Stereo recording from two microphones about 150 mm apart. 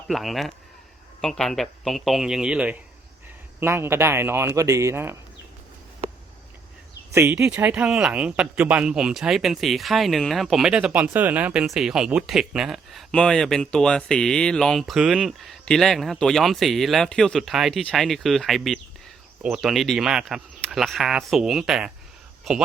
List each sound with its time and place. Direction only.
0.1 s speech: centre (ahead or behind); by 5.1 s 20° right (ahead or behind)
7.1 s speech: 15° right (ahead or behind)